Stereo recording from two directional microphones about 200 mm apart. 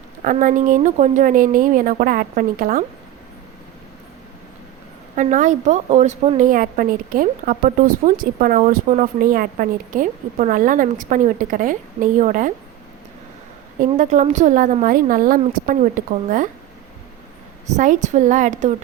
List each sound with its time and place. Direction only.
0.3 s a woman's voice: 40° right (ahead or behind)
5.1 s a woman's voice: 40° right (ahead or behind)
13.7 s a woman's voice: 40° right (ahead or behind)
17.7 s a woman's voice: 35° right (ahead or behind)